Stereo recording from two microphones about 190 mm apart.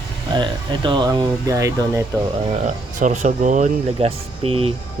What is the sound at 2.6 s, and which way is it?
Speech, 40° right (ahead or behind).